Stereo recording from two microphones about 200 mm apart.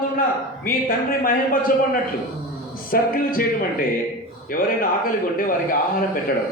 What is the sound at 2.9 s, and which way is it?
A man's voice, 45° left (ahead or behind).